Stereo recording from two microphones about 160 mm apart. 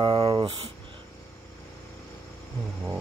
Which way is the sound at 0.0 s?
30° right (ahead or behind).